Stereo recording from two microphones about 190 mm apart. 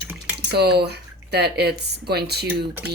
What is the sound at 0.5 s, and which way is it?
Speech, 60° right (ahead or behind).